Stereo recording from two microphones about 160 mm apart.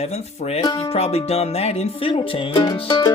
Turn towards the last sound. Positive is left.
turn(degrees=30)  # may be behind; listen again after turning